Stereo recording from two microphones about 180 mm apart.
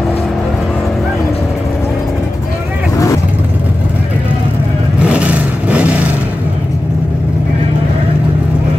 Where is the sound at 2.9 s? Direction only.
15° left (ahead or behind).